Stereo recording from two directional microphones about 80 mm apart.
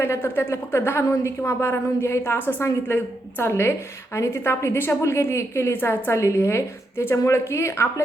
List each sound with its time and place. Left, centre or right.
0.0 s a woman's voice: left